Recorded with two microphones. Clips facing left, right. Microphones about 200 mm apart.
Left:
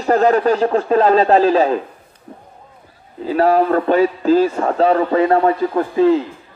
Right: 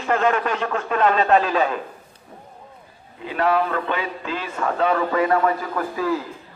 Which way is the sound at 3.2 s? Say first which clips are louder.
Left 7 dB; 35° left (ahead or behind).